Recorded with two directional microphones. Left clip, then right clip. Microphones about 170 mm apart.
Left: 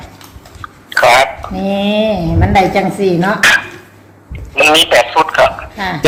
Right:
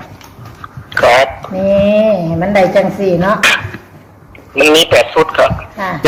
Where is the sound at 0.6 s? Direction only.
35° left (ahead or behind).